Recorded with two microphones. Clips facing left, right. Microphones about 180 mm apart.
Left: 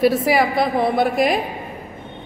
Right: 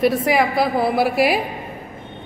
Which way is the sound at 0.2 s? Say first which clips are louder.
Even; centre (ahead or behind).